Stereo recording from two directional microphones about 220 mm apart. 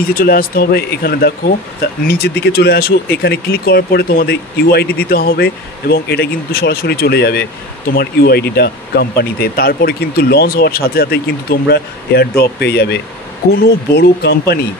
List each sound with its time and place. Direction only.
0.0 s speech: 40° left (ahead or behind)